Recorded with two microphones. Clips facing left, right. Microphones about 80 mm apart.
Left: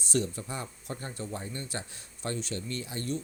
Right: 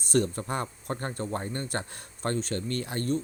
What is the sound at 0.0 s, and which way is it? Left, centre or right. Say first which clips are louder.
Speech: right 5 dB; right.